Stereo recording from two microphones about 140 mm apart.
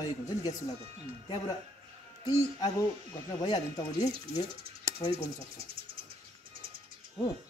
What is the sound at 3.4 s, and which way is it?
Speech, 30° left (ahead or behind).